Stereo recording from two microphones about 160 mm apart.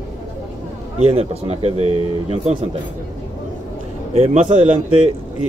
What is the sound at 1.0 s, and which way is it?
Speech, 40° right (ahead or behind).